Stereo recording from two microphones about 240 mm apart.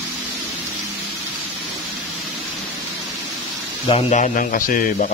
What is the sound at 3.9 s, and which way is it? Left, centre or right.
A man's voice, left.